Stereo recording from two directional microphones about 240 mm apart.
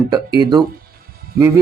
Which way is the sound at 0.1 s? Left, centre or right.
Centre.